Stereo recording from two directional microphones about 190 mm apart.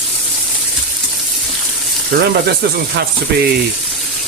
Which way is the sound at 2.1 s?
50° right (ahead or behind).